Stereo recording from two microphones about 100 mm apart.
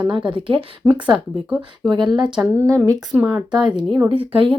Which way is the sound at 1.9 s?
50° right (ahead or behind).